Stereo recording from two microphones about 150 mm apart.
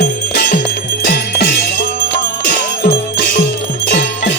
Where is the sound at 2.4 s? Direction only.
65° left (ahead or behind).